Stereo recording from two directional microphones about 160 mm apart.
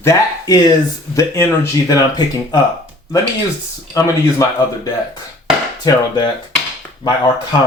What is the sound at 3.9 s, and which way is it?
Speech, 20° left (ahead or behind).